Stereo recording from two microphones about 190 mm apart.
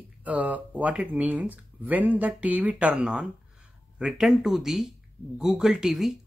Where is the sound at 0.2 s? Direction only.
10° right (ahead or behind).